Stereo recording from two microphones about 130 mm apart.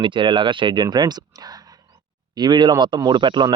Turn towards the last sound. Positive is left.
turn(degrees=-35)  # may be behind; listen again after turning